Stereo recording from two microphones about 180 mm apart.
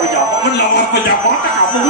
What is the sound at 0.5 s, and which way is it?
Music, 70° left (ahead or behind).